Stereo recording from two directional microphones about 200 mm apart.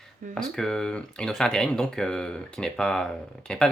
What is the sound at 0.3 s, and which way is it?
Speech, centre (ahead or behind).